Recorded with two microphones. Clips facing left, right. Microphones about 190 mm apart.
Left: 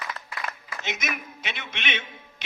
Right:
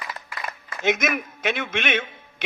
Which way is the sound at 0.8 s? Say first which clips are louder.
Right 11 dB; 50° right (ahead or behind).